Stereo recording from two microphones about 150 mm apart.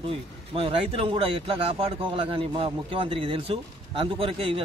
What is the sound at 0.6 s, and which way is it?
Speech, 35° right (ahead or behind).